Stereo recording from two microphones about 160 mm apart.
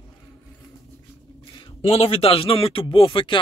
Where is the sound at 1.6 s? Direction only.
40° left (ahead or behind).